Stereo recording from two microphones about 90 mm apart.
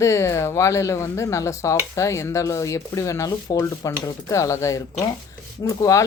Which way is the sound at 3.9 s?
35° left (ahead or behind).